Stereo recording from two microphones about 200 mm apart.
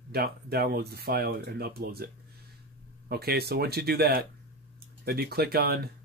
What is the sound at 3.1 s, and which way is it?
Speech, 50° right (ahead or behind).